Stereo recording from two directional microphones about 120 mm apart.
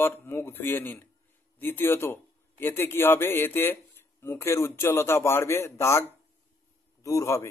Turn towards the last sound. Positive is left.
turn(degrees=25)  # may be behind; listen again after turning